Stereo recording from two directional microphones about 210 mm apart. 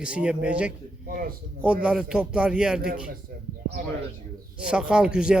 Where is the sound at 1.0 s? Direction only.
45° right (ahead or behind).